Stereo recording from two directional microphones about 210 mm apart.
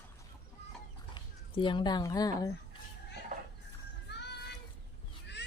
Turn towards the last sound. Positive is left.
turn(degrees=55)  # may be behind; listen again after turning